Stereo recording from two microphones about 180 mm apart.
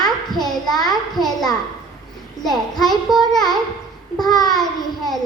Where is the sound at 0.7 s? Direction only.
Centre (ahead or behind).